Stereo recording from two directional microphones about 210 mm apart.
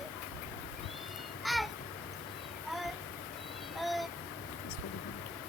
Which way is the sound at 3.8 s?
Centre (ahead or behind).